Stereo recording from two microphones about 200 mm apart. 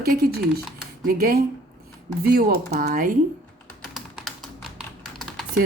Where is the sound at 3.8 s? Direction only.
Centre (ahead or behind).